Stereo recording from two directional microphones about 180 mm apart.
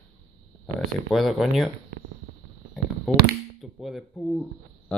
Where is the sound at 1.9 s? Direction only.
90° right.